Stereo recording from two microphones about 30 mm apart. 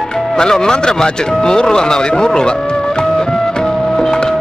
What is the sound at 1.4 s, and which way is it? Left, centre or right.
A man's voice, left.